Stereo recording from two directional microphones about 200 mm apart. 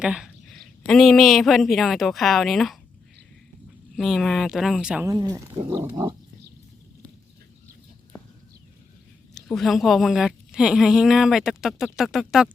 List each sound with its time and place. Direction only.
0.0 s a sound: 5° right (ahead or behind)
0.9 s a woman's voice: centre (ahead or behind)
3.9 s a woman's voice: centre (ahead or behind)
5.0 s speech: 20° right (ahead or behind)
9.3 s a woman's voice: centre (ahead or behind)